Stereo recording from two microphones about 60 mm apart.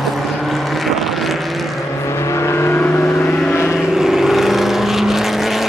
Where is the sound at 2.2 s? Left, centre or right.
Left.